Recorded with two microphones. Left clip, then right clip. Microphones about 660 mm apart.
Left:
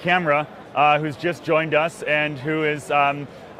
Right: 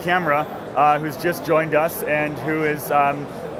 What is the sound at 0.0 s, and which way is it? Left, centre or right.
Speech, left.